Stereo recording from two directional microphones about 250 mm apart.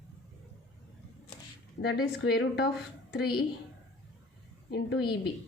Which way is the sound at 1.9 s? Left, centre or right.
Left.